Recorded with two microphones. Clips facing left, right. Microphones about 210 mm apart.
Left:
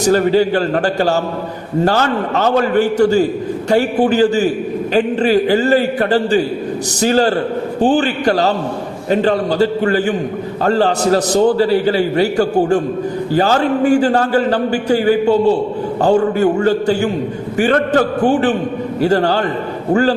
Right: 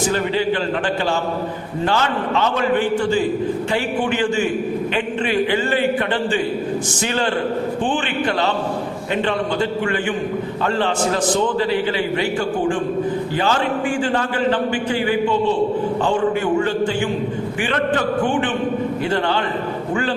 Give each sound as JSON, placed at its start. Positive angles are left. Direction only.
{"t": 0.0, "sound": "a man's voice", "side_deg": 40}